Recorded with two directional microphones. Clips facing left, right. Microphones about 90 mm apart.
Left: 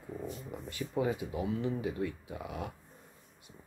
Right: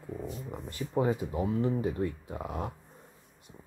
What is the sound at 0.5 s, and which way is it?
Speech, 40° right (ahead or behind).